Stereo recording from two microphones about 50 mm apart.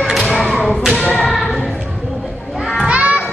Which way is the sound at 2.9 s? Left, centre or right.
Right.